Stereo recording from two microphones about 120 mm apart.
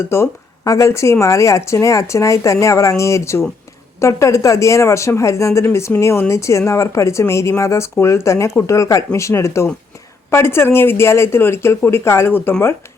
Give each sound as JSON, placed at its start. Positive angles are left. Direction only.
{"t": 0.1, "sound": "a woman's voice", "side_deg": 25}